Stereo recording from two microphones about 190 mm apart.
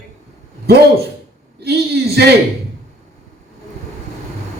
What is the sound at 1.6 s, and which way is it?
Speech, 55° right (ahead or behind).